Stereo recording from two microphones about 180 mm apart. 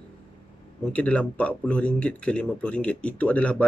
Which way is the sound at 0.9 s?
5° left (ahead or behind).